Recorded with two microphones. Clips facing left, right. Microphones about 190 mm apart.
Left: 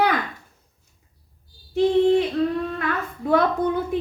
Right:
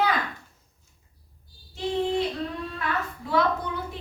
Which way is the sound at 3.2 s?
50° left (ahead or behind).